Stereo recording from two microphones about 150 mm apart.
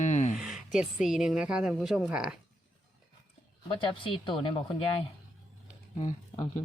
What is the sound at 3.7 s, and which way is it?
Speech, 35° left (ahead or behind).